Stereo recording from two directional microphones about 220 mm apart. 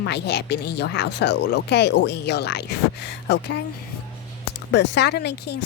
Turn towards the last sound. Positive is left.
turn(degrees=50)  # may be behind; listen again after turning